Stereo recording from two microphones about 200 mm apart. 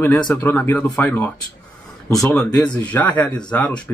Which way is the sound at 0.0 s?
10° left (ahead or behind).